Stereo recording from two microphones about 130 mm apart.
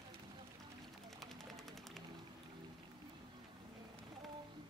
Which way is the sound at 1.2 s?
Centre (ahead or behind).